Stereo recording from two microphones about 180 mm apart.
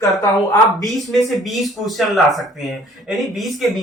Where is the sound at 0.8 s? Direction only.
Centre (ahead or behind).